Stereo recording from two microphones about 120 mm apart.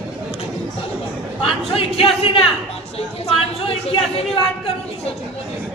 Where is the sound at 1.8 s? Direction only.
50° left (ahead or behind).